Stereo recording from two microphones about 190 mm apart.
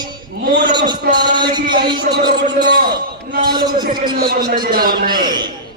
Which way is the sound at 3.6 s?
25° right (ahead or behind).